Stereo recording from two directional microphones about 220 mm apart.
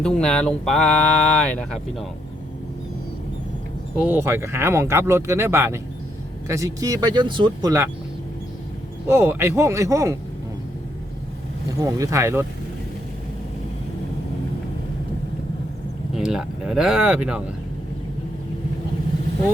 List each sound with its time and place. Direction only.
0.0 s speech: 5° left (ahead or behind)
3.9 s speech: 10° right (ahead or behind)
9.0 s speech: 10° right (ahead or behind)
11.8 s speech: 15° right (ahead or behind)
16.1 s speech: centre (ahead or behind)